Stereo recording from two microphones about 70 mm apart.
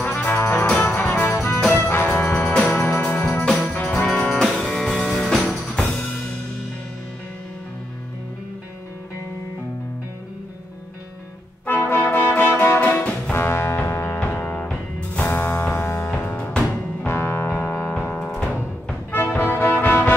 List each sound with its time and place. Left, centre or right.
0.0 s music: left
0.7 s music: left
1.7 s brass instrument: left
2.1 s music: left
2.4 s music: centre
2.8 s music: left
3.3 s music: centre
11.6 s music: left
16.1 s music: centre
17.1 s music: left